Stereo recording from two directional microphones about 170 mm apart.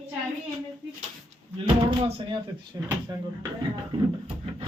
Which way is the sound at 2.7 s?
20° right (ahead or behind).